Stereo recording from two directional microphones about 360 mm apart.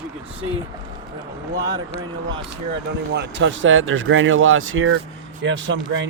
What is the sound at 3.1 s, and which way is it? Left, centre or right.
Speech, right.